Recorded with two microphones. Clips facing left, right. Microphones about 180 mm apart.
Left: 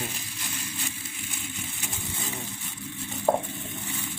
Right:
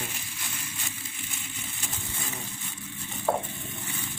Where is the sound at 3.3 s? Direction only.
20° left (ahead or behind).